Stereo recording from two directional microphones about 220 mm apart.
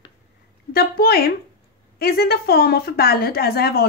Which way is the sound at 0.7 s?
45° left (ahead or behind).